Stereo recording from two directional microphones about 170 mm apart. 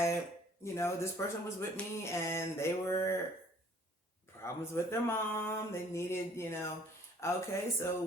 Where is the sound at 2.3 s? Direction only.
15° left (ahead or behind).